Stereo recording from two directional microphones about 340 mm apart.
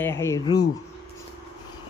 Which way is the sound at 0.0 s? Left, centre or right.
Centre.